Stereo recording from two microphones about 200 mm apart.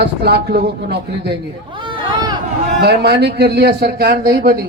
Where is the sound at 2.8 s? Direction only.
55° right (ahead or behind).